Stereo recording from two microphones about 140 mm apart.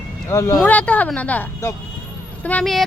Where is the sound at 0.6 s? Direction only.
10° left (ahead or behind).